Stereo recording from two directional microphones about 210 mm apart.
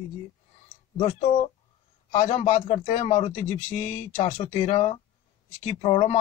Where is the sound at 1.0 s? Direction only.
30° left (ahead or behind).